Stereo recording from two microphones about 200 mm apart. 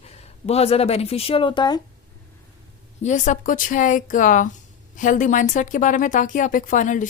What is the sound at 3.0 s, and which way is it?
Speech, 35° left (ahead or behind).